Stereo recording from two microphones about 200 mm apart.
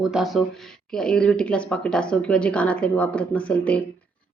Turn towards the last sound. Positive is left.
turn(degrees=5)  # may be behind; listen again after turning